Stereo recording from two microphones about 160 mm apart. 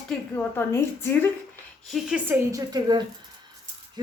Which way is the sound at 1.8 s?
Centre (ahead or behind).